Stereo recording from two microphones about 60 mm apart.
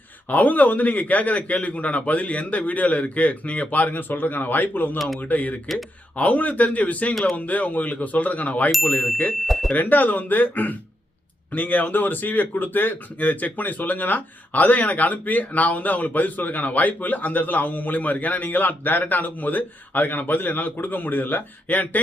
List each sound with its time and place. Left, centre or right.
0.3 s speech: left
9.5 s speech: centre
9.7 s speech: left